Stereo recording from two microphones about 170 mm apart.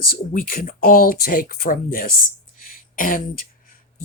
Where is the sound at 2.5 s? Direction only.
55° left (ahead or behind).